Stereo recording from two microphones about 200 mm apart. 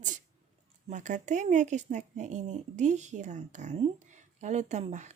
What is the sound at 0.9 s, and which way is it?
Speech, 35° right (ahead or behind).